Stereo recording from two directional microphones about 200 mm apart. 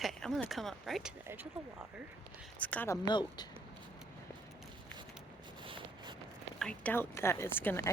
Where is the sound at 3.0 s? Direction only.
20° left (ahead or behind).